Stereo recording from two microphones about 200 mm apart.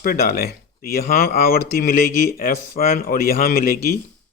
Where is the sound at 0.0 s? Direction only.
50° left (ahead or behind).